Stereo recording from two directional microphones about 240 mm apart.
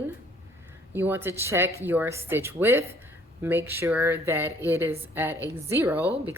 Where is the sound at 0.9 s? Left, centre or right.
Centre.